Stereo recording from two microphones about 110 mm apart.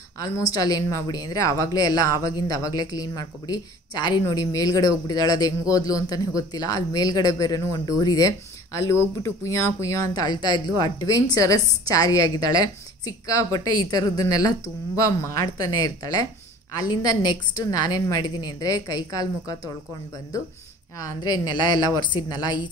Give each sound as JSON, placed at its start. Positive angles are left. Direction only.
{"t": 0.4, "sound": "speech", "side_deg": 35}
{"t": 21.1, "sound": "speech", "side_deg": 35}